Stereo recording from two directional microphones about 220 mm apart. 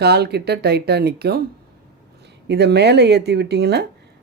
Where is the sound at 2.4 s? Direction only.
50° right (ahead or behind).